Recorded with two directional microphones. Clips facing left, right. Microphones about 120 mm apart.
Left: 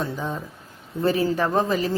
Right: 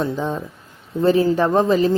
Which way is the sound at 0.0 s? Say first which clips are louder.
Right 6 dB; 25° right (ahead or behind).